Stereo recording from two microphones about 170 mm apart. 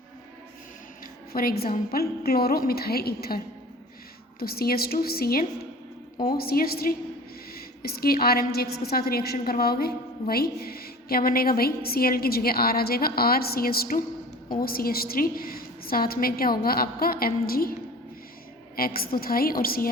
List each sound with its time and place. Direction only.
1.3 s a woman's voice: 60° left (ahead or behind)
18.8 s a woman's voice: 60° left (ahead or behind)